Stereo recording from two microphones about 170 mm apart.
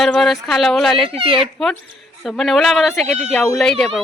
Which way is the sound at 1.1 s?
35° right (ahead or behind).